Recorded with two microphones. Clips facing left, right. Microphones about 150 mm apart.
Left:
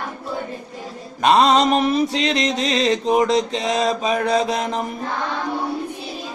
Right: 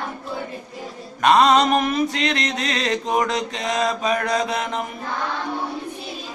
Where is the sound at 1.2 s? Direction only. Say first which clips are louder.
Even; 30° left (ahead or behind).